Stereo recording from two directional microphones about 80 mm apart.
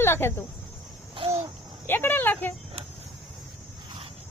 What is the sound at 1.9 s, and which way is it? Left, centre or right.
Speech, left.